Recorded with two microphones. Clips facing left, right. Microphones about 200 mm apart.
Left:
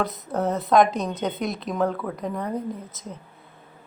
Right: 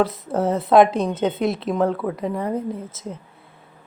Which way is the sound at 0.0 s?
30° right (ahead or behind).